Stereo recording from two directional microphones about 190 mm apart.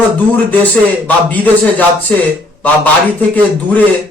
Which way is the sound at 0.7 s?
10° left (ahead or behind).